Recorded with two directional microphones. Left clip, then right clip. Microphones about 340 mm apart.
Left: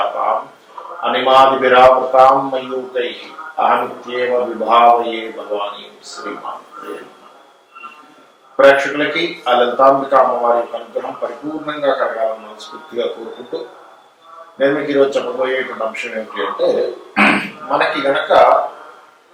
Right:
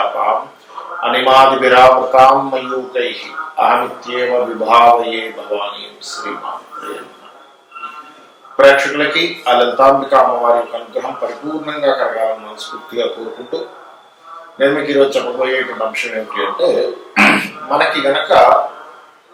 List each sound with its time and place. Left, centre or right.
1.0 s a man's voice: centre
5.4 s speech: left
8.5 s a man's voice: centre
10.7 s a man's voice: left
11.6 s a man's voice: centre
14.6 s speech: centre
16.6 s a sound: centre
17.9 s a man's voice: centre